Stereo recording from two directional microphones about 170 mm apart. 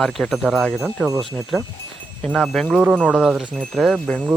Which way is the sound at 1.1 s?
25° right (ahead or behind).